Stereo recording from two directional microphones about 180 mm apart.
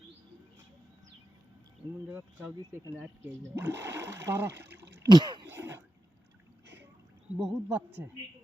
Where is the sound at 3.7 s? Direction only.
15° right (ahead or behind).